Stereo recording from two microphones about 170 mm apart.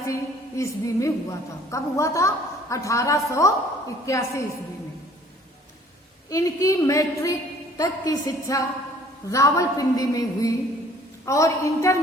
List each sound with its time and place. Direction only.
0.0 s a woman's voice: 15° left (ahead or behind)
6.3 s a woman's voice: 20° left (ahead or behind)